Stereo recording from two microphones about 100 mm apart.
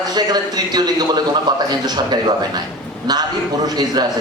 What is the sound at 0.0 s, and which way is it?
A man's voice, 40° right (ahead or behind).